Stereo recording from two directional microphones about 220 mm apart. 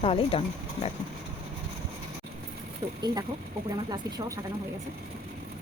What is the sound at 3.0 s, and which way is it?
Speech, 15° right (ahead or behind).